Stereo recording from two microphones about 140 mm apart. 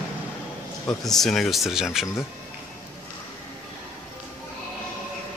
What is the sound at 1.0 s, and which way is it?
Speech, 5° left (ahead or behind).